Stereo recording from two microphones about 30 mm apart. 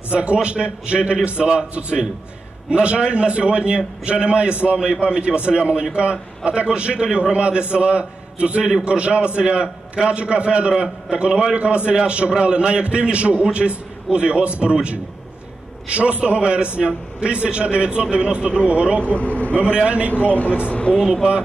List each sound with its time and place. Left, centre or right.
0.1 s a man's voice: right
19.1 s a man's voice: left
21.0 s speech: centre